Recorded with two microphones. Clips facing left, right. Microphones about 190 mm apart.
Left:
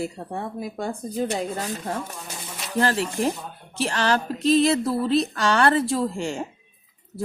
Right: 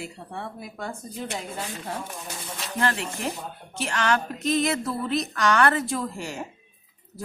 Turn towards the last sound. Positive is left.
turn(degrees=30)  # may be behind; listen again after turning